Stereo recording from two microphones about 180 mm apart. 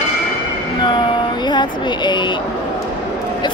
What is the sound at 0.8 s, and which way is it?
Speech, 25° left (ahead or behind).